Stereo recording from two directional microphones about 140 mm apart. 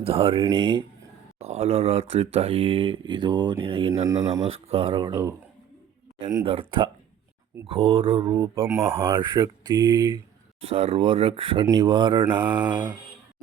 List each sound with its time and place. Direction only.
0.0 s speech: 45° right (ahead or behind)
1.4 s speech: 50° right (ahead or behind)
4.0 s speech: 25° right (ahead or behind)
4.4 s speech: 45° right (ahead or behind)
6.4 s speech: 40° right (ahead or behind)
8.5 s speech: 20° right (ahead or behind)
10.8 s speech: 45° right (ahead or behind)